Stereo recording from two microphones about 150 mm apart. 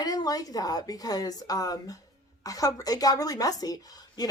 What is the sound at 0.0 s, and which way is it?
Speech, 25° left (ahead or behind).